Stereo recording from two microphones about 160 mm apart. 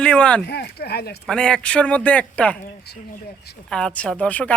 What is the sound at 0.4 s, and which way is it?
Speech, 90° left.